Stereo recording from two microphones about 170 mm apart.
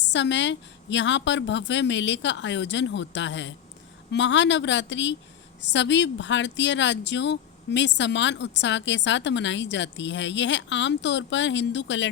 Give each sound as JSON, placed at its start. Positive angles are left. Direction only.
{"t": 0.0, "sound": "speech", "side_deg": 90}